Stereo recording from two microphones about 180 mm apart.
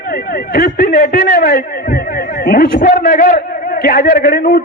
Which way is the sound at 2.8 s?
50° left (ahead or behind).